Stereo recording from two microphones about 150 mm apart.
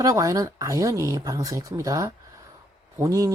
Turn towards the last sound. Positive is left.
turn(degrees=-20)  # may be behind; listen again after turning